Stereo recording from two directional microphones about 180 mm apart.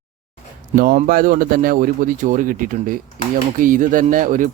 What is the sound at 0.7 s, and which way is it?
Speech, 50° right (ahead or behind).